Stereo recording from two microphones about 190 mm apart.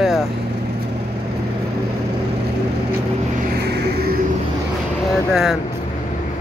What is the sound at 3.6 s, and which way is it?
Music, 60° right (ahead or behind).